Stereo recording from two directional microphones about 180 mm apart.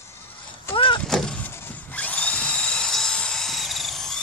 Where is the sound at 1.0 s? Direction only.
5° left (ahead or behind).